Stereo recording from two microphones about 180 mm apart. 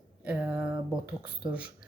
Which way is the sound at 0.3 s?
5° right (ahead or behind).